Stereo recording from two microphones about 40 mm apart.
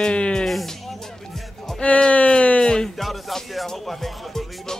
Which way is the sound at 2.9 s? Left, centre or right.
Centre.